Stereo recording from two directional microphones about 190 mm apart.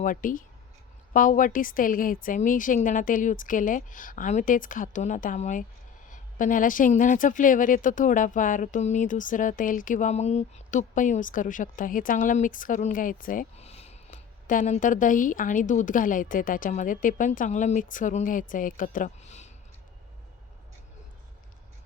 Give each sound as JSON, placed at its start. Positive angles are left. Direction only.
{"t": 0.0, "sound": "a woman's voice", "side_deg": 45}